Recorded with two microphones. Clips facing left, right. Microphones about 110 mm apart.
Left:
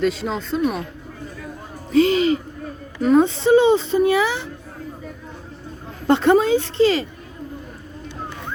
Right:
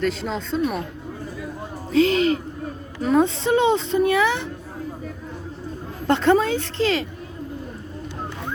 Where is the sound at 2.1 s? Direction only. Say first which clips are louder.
Left 1 dB; 70° right (ahead or behind).